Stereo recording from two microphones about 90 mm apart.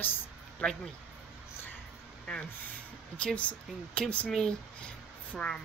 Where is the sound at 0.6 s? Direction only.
10° left (ahead or behind).